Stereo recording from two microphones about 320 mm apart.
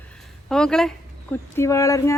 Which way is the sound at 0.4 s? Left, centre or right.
Centre.